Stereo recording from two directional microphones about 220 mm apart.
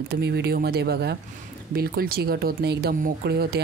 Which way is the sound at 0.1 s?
45° right (ahead or behind).